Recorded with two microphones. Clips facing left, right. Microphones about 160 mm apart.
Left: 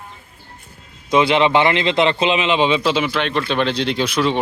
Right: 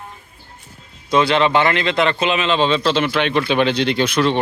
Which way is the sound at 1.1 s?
20° left (ahead or behind).